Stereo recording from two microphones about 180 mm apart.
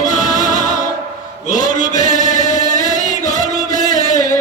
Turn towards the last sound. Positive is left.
turn(degrees=45)  # may be behind; listen again after turning